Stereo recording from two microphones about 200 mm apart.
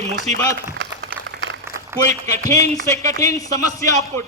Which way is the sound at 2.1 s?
35° right (ahead or behind).